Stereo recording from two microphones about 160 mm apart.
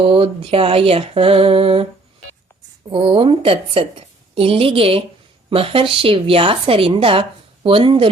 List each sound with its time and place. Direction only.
0.0 s a woman's voice: 35° right (ahead or behind)
2.9 s a woman's voice: 35° right (ahead or behind)